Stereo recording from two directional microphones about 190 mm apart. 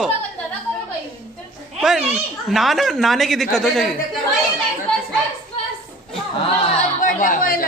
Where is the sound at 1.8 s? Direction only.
Centre (ahead or behind).